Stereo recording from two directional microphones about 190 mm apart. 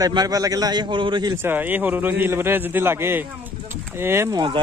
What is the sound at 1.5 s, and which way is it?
A man's voice, 10° right (ahead or behind).